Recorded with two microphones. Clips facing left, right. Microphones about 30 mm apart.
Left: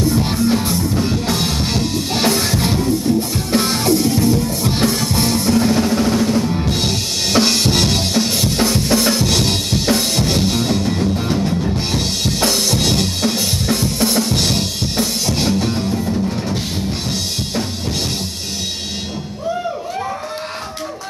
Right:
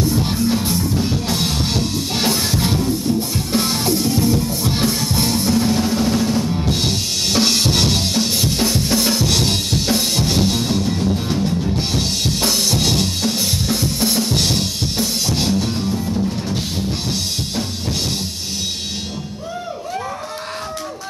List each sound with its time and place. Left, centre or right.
0.1 s music: centre
6.7 s drum kit: centre
12.0 s drum: centre
15.9 s music: centre